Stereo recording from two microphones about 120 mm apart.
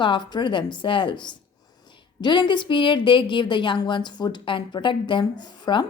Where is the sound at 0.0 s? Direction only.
40° left (ahead or behind).